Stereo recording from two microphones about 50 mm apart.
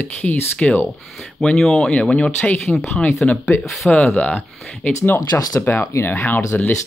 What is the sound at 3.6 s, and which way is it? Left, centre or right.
Speech, centre.